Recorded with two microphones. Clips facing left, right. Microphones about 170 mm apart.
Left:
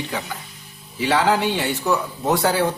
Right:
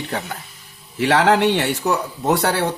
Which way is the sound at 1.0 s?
75° right (ahead or behind).